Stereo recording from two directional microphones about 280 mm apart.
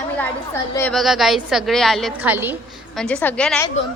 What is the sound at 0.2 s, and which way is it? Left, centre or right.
A woman's voice, centre.